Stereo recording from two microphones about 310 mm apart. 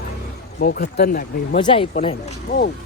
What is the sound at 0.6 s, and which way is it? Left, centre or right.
Speech, left.